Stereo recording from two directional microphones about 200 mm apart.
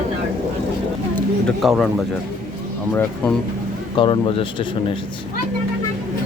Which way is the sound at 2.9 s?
10° left (ahead or behind).